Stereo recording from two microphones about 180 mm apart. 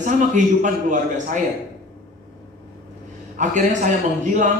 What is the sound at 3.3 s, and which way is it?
Speech, 45° right (ahead or behind).